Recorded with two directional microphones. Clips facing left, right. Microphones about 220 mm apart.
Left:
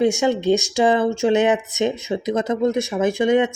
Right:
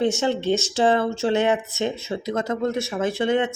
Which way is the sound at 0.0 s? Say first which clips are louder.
Left 4 dB; 15° left (ahead or behind).